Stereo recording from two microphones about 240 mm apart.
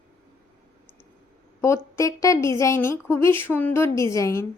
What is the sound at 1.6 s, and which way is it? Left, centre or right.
A woman's voice, centre.